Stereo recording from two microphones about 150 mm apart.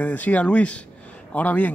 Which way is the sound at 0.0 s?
10° left (ahead or behind).